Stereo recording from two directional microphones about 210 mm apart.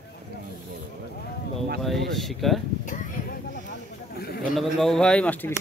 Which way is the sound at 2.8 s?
40° left (ahead or behind).